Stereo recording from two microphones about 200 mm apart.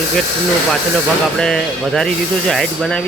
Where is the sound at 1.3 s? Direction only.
5° left (ahead or behind).